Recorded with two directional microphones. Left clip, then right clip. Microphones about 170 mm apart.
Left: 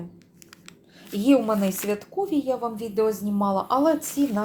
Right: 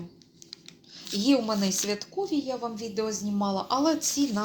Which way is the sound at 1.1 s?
15° left (ahead or behind).